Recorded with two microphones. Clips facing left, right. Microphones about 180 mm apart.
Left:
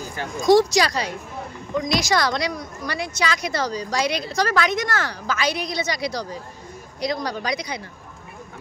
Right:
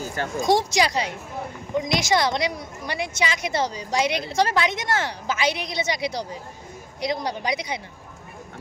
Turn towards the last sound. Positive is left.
turn(degrees=-20)  # may be behind; listen again after turning